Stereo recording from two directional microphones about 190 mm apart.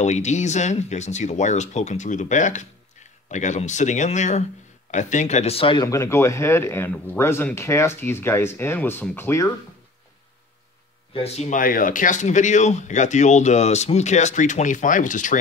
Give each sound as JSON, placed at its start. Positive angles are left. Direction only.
{"t": 0.0, "sound": "speech", "side_deg": 35}
{"t": 11.1, "sound": "speech", "side_deg": 35}